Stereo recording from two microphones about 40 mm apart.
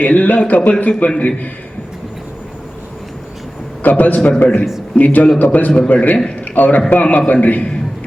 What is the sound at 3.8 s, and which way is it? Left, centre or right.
A man's voice, left.